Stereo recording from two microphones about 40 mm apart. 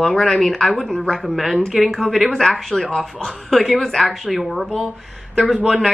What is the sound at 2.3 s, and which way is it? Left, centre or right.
Speech, centre.